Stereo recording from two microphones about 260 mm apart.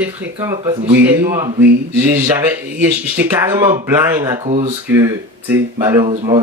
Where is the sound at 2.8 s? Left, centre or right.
Centre.